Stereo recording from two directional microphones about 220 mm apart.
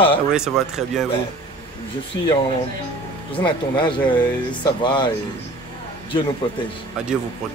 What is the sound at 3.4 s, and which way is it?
Speech, 20° left (ahead or behind).